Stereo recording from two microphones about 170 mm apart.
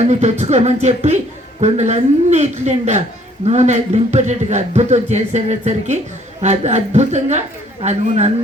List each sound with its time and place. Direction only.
0.0 s a man's voice: 40° right (ahead or behind)